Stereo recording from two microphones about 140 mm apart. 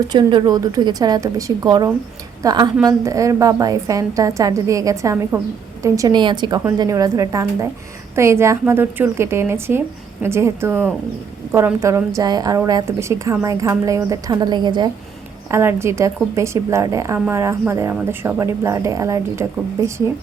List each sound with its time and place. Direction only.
0.1 s a woman's voice: 35° right (ahead or behind)
15.4 s speech: 20° right (ahead or behind)